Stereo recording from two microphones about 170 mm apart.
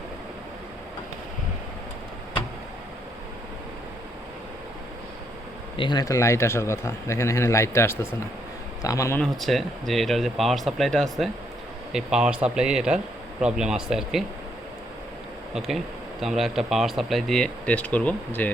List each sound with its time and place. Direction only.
5.7 s a man's voice: 30° left (ahead or behind)
9.2 s speech: centre (ahead or behind)
15.5 s a man's voice: centre (ahead or behind)